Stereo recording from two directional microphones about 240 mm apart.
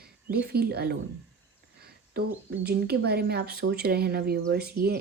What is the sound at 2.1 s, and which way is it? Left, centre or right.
Speech, right.